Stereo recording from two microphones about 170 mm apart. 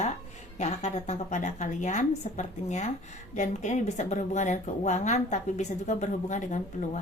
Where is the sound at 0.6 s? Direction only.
40° left (ahead or behind).